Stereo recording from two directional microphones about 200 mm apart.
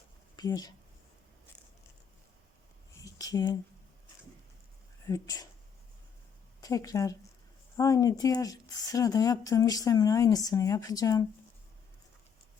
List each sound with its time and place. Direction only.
0.3 s speech: 20° left (ahead or behind)
3.0 s a sound: 15° left (ahead or behind)
5.0 s speech: 20° left (ahead or behind)
6.6 s speech: 15° left (ahead or behind)